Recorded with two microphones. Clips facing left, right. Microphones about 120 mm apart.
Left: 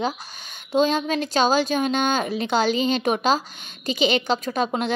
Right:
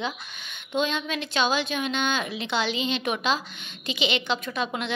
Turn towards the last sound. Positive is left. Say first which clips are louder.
# left 6 dB
turn(degrees=40)  # may be behind; listen again after turning